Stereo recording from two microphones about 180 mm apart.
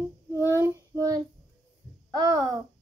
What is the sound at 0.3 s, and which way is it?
Child singing, 15° right (ahead or behind).